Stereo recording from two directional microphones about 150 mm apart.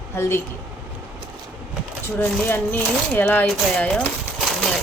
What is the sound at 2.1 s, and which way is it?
Speech, 15° left (ahead or behind).